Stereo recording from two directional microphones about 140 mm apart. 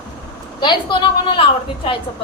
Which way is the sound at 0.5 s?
35° left (ahead or behind).